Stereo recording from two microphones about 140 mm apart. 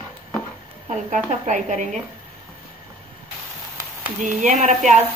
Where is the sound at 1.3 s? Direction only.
60° right (ahead or behind).